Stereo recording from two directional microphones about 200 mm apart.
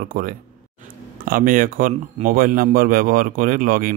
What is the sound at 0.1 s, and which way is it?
Speech, 45° right (ahead or behind).